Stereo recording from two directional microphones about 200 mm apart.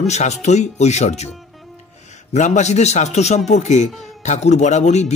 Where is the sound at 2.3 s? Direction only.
35° left (ahead or behind).